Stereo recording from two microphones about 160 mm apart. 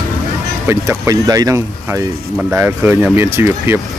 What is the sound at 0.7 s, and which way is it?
Speech, 20° right (ahead or behind).